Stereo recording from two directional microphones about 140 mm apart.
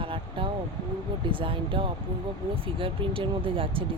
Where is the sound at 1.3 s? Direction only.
40° right (ahead or behind).